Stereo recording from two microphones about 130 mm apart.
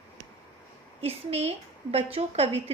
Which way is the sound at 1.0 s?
50° right (ahead or behind).